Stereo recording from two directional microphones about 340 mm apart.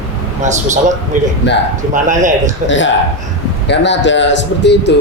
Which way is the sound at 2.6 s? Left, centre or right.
Left.